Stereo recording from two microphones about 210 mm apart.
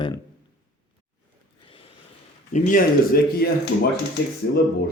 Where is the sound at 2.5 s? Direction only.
40° left (ahead or behind).